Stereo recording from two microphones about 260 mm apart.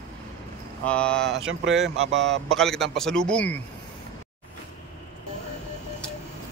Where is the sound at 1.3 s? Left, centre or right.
Right.